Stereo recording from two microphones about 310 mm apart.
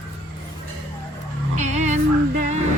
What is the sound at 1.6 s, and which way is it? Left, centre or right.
Music, right.